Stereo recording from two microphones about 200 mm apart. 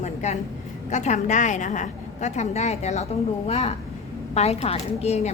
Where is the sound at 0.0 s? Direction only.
35° left (ahead or behind).